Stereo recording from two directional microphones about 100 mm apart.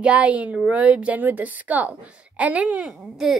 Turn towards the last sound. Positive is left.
turn(degrees=0)  # may be behind; listen again after turning